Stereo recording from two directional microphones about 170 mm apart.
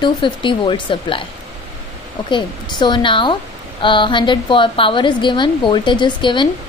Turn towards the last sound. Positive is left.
turn(degrees=25)  # may be behind; listen again after turning